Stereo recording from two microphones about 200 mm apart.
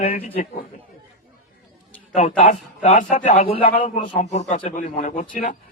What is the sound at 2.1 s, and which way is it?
A man's voice, 40° left (ahead or behind).